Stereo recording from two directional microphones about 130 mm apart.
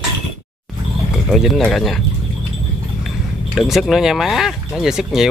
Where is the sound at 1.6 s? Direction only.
Centre (ahead or behind).